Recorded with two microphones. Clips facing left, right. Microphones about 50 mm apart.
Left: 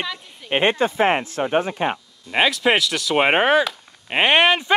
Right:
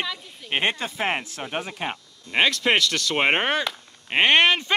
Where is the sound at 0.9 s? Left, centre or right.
Left.